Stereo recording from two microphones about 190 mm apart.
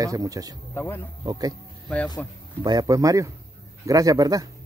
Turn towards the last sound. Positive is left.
turn(degrees=-20)  # may be behind; listen again after turning